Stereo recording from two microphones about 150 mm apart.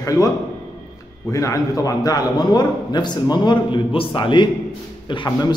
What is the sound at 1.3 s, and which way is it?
A man's voice, 20° left (ahead or behind).